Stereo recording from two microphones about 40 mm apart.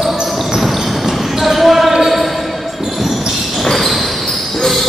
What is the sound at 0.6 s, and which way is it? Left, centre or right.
Basketball bounce, centre.